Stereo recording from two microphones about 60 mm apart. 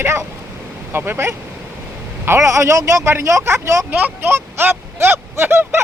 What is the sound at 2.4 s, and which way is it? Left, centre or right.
Speech, right.